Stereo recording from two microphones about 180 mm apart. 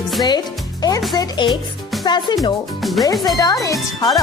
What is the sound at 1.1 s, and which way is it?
Speech, 25° left (ahead or behind).